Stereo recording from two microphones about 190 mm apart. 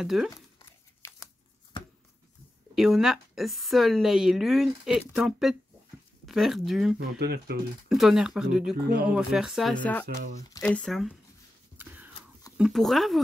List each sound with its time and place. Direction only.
0.0 s a woman's voice: centre (ahead or behind)
0.3 s tearing: 15° left (ahead or behind)
2.7 s a woman's voice: 5° right (ahead or behind)
7.2 s speech: 60° right (ahead or behind)
7.9 s a woman's voice: centre (ahead or behind)
10.0 s speech: 40° right (ahead or behind)
10.6 s a woman's voice: 5° left (ahead or behind)
11.8 s a sound: 10° right (ahead or behind)
12.5 s a woman's voice: centre (ahead or behind)